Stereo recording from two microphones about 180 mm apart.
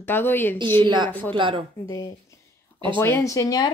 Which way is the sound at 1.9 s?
20° left (ahead or behind).